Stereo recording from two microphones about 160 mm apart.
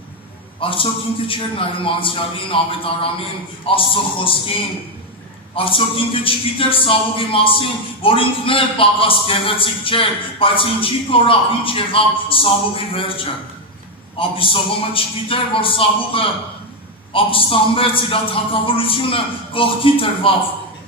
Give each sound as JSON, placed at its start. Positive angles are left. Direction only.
{"t": 0.6, "sound": "a man's voice", "side_deg": 35}
{"t": 5.5, "sound": "a man's voice", "side_deg": 35}